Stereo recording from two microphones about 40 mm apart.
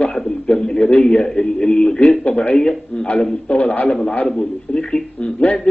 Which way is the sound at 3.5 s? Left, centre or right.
Left.